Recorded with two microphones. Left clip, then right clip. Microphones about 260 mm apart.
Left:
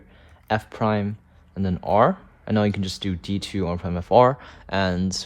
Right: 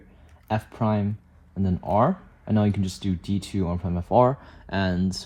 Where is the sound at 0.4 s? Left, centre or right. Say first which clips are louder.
Left 4 dB; right.